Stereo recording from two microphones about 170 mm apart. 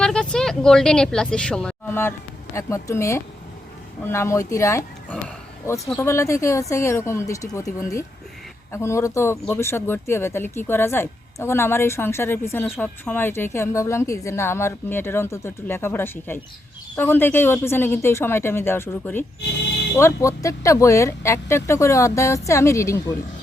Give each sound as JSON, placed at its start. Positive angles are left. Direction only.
{"t": 0.0, "sound": "a woman's voice", "side_deg": 5}